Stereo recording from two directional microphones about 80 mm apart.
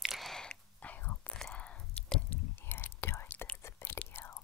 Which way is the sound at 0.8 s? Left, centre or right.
Left.